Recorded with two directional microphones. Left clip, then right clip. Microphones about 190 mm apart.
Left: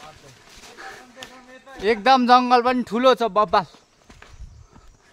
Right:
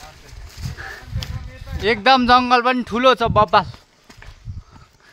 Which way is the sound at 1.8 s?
15° right (ahead or behind).